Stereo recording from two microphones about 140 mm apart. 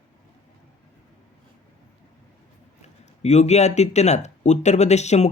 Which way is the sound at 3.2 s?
50° left (ahead or behind).